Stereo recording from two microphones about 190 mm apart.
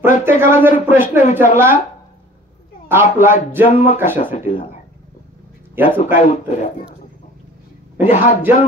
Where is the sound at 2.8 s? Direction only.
10° right (ahead or behind).